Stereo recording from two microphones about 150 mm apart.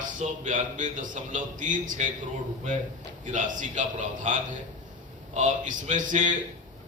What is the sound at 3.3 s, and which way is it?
A man's voice, 55° right (ahead or behind).